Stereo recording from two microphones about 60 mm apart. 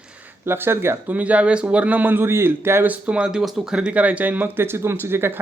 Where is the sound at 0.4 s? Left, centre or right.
Right.